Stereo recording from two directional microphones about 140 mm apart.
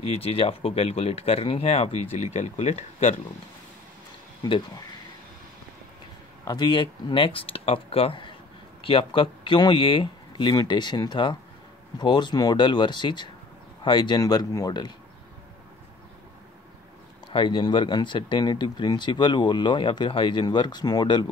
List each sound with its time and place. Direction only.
0.1 s speech: 45° left (ahead or behind)
4.5 s speech: 35° left (ahead or behind)
6.4 s speech: 30° left (ahead or behind)
17.3 s speech: 35° left (ahead or behind)